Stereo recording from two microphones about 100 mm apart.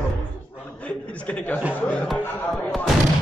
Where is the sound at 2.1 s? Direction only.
Centre (ahead or behind).